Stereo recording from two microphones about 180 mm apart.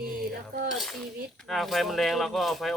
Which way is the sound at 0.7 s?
Centre (ahead or behind).